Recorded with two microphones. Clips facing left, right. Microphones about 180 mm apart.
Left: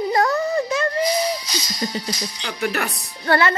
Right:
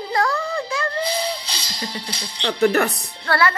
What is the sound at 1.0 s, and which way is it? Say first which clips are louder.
Speech: left 3 dB; 30° right (ahead or behind).